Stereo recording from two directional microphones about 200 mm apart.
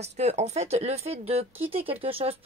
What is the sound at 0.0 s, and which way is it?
Speech, 35° right (ahead or behind).